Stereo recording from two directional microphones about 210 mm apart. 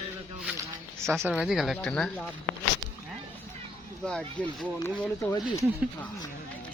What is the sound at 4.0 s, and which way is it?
Speech, 5° left (ahead or behind).